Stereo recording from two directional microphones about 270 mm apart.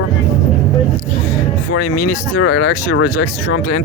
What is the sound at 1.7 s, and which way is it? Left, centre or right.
Speech, left.